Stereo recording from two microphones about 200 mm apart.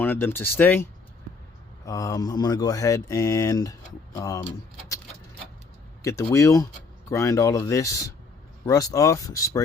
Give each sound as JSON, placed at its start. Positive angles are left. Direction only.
{"t": 0.0, "sound": "speech", "side_deg": 10}
{"t": 6.0, "sound": "speech", "side_deg": 15}